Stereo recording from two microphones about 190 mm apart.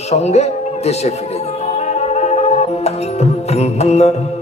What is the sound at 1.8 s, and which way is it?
Music, 35° left (ahead or behind).